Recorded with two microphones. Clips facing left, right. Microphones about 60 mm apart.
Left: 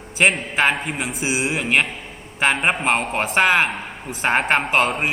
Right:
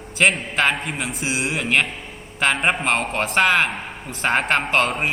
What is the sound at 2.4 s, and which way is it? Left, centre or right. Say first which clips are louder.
Speech: left 1 dB; centre.